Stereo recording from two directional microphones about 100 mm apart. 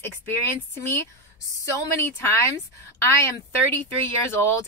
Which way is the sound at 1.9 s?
25° left (ahead or behind).